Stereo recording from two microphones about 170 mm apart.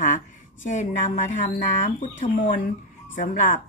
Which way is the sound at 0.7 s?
50° left (ahead or behind).